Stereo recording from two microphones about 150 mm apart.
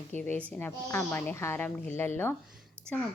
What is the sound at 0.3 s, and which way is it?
A woman's voice, 15° left (ahead or behind).